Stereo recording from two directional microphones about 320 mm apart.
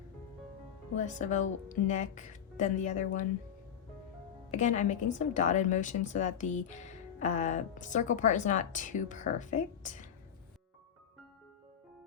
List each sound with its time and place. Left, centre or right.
0.9 s a woman's voice: left
4.5 s a woman's voice: left